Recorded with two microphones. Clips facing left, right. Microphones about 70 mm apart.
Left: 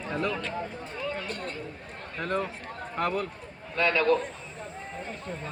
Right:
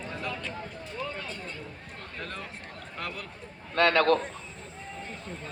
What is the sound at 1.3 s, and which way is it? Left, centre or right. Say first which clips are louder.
Speech: left 4 dB; left.